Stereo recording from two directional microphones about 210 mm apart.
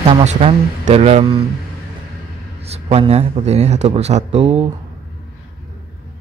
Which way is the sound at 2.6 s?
30° right (ahead or behind).